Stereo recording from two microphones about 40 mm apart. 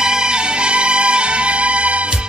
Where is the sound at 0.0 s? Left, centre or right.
Centre.